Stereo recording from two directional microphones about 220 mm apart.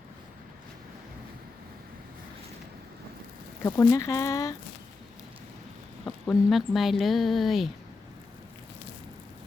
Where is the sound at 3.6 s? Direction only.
15° left (ahead or behind).